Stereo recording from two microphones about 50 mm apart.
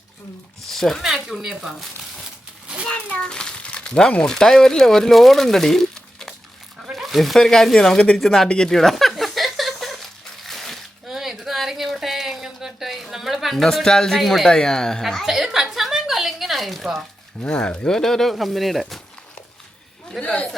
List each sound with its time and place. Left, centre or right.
0.7 s speech: centre
1.0 s speech: centre
2.8 s cat: left
4.2 s speech: centre
6.9 s speech: centre
7.8 s speech: centre
8.4 s a sound: centre
14.2 s speech: centre
14.4 s speech: centre
15.0 s a sound: centre
17.4 s speech: left
17.8 s speech: centre
20.2 s chatter: left